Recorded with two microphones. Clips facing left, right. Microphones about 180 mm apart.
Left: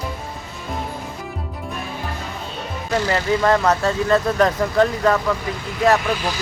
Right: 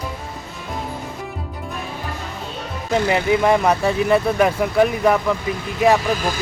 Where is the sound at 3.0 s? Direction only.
15° right (ahead or behind).